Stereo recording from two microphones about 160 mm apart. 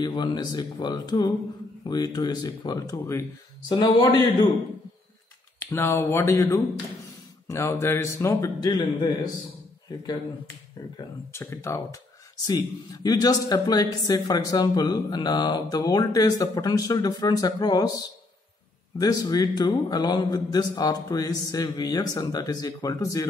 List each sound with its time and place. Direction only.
0.0 s speech: 25° left (ahead or behind)
5.6 s a man's voice: 15° left (ahead or behind)
11.3 s a man's voice: 15° left (ahead or behind)
18.9 s speech: 25° left (ahead or behind)